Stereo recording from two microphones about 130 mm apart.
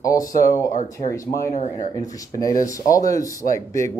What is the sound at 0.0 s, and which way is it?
Speech, 25° left (ahead or behind).